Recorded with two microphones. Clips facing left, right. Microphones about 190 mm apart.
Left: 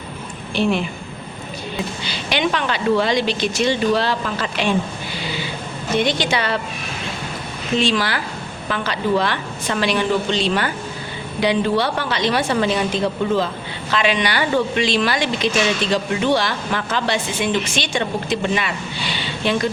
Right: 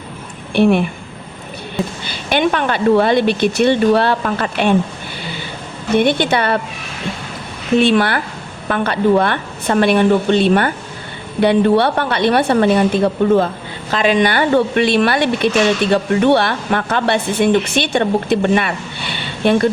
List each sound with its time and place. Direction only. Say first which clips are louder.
0.5 s speech: right 7 dB; 60° right (ahead or behind)
2.3 s speech: right 5 dB; 50° right (ahead or behind)
5.9 s speech: right 6 dB; 55° right (ahead or behind)
7.8 s speech: right 7 dB; 60° right (ahead or behind)